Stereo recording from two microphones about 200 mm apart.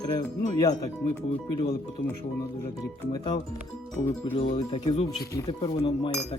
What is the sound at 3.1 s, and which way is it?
Speech, 20° left (ahead or behind).